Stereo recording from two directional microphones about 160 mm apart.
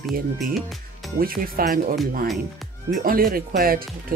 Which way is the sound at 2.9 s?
65° right (ahead or behind).